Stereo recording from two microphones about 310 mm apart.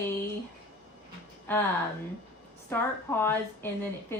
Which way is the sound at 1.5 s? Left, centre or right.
Centre.